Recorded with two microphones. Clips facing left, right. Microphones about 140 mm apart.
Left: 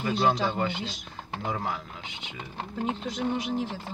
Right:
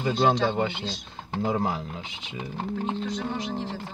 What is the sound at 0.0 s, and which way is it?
Speech, 25° right (ahead or behind).